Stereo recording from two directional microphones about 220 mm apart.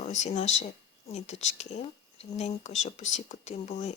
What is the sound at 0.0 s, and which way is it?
A woman's voice, 30° left (ahead or behind).